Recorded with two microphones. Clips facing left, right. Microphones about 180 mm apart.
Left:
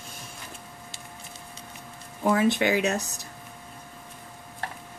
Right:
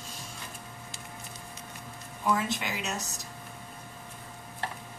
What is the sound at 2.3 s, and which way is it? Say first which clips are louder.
Speech: left 8 dB; 65° left (ahead or behind).